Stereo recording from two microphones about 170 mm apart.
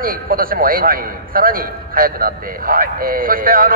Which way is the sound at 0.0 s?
60° right (ahead or behind).